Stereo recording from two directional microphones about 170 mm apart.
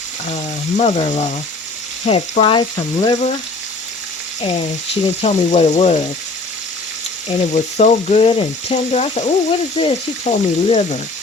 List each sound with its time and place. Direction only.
0.3 s frying: 45° left (ahead or behind); by 3.2 s 25° left (ahead or behind)
4.4 s frying: 35° left (ahead or behind)
7.5 s frying: 45° left (ahead or behind)